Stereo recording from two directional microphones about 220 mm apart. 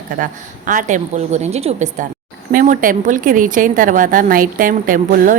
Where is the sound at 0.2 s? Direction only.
35° right (ahead or behind).